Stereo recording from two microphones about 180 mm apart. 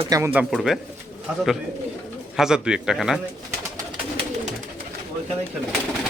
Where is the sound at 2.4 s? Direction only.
5° right (ahead or behind).